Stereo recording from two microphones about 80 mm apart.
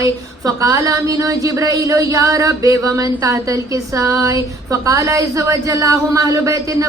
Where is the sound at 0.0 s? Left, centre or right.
Right.